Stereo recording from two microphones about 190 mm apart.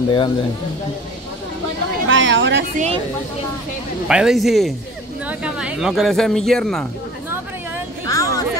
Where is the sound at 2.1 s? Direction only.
75° right (ahead or behind).